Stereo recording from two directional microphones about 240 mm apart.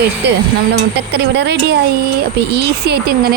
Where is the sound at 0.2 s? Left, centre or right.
Right.